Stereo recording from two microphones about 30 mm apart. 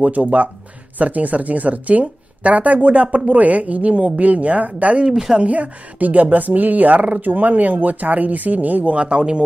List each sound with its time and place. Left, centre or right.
0.0 s speech: right
5.0 s speech: centre
5.4 s speech: right
8.9 s speech: right